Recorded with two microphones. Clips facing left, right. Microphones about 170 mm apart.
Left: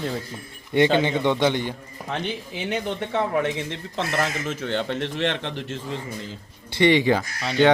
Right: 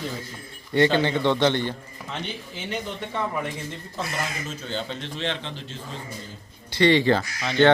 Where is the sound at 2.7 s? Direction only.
75° left (ahead or behind).